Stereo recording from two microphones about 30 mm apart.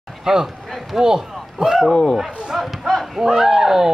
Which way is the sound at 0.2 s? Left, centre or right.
Right.